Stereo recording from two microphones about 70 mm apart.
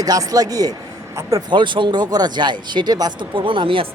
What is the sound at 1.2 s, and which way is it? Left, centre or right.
Speech, right.